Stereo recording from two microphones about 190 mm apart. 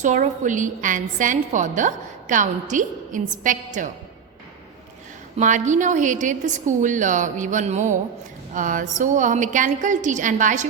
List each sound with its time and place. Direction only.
0.0 s a woman's voice: 40° right (ahead or behind)
5.4 s a woman's voice: 40° right (ahead or behind)